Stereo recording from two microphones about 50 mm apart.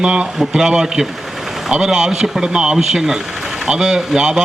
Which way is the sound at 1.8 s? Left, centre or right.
Centre.